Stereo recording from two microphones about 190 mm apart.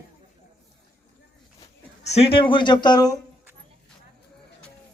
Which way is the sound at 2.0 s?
30° left (ahead or behind).